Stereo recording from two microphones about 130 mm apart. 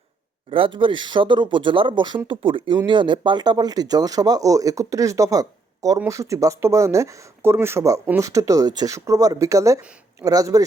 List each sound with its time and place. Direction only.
0.5 s speech: 40° right (ahead or behind)